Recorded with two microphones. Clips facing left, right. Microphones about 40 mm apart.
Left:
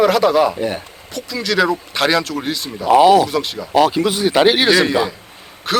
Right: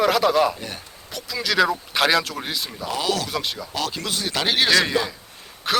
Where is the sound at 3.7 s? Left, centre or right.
Left.